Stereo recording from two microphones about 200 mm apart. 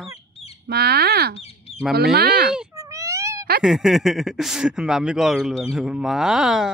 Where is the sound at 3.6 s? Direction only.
Centre (ahead or behind).